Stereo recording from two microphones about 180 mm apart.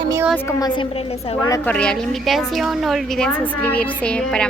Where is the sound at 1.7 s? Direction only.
5° left (ahead or behind).